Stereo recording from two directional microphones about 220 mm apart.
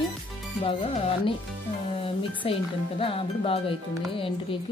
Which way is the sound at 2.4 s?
25° left (ahead or behind).